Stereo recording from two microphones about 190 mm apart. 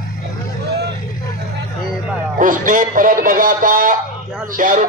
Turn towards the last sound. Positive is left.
turn(degrees=-45)  # may be behind; listen again after turning